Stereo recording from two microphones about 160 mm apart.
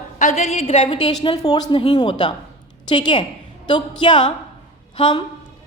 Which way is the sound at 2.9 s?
30° left (ahead or behind).